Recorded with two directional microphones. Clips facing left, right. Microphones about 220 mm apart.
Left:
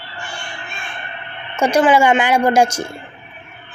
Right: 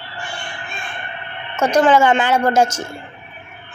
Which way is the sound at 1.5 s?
10° left (ahead or behind).